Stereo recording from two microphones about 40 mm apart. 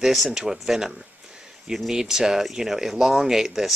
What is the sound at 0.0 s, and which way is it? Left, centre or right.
Speech, centre.